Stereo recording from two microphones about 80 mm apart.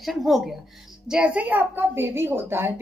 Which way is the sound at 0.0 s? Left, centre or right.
Centre.